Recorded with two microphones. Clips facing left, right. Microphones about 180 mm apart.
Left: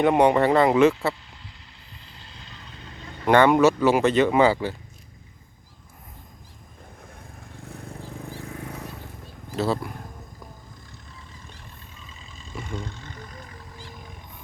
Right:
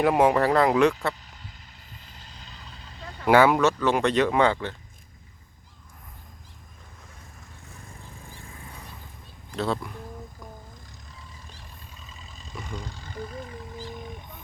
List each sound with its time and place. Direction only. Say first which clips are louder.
0.0 s speech: left 2 dB; centre (ahead or behind)
2.0 s vehicle: left 3 dB; 45° right (ahead or behind)
3.2 s speech: left 1 dB; 5° right (ahead or behind)
3.6 s speech: left 4 dB; 10° left (ahead or behind)
7.0 s vehicle: left 5 dB; 55° left (ahead or behind); by 8.8 s 70° left (ahead or behind)
9.6 s speech: left 3 dB; 5° left (ahead or behind)
12.9 s a sound: right 3 dB; 35° right (ahead or behind)